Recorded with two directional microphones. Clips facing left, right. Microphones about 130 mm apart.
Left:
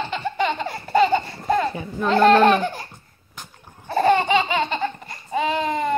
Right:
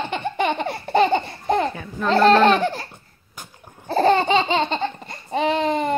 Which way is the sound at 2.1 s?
35° right (ahead or behind).